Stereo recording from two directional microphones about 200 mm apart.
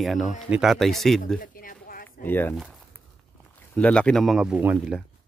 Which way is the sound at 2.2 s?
10° left (ahead or behind).